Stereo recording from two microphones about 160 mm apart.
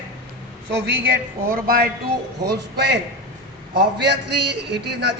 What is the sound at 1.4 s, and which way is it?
Speech, 65° right (ahead or behind).